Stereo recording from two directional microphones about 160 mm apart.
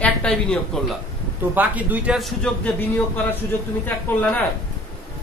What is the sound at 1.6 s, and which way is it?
Speech, 10° right (ahead or behind).